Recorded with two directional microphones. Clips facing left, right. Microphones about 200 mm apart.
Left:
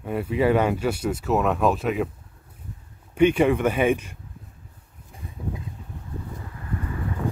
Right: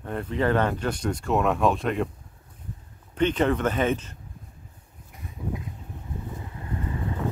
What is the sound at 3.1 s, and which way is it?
Speech, 10° left (ahead or behind).